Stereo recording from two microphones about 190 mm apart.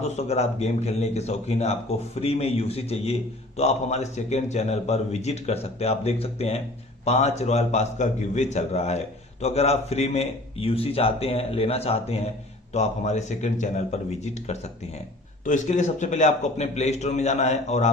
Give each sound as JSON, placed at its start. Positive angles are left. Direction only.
{"t": 0.0, "sound": "speech", "side_deg": 35}
{"t": 15.4, "sound": "speech", "side_deg": 40}